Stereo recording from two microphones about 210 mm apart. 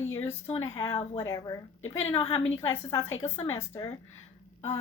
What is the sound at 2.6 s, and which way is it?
Speech, 15° left (ahead or behind).